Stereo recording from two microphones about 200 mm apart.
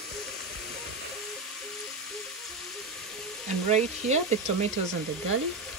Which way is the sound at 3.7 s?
35° right (ahead or behind).